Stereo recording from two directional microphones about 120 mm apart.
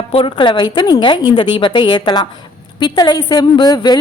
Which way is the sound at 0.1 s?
50° left (ahead or behind).